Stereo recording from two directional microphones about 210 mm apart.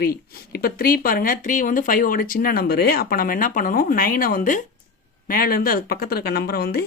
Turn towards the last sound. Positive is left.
turn(degrees=50)  # may be behind; listen again after turning